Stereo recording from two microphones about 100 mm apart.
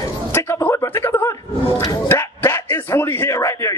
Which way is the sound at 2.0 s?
25° left (ahead or behind).